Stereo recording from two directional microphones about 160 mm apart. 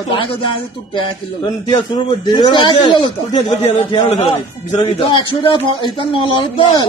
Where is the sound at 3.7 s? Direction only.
40° left (ahead or behind).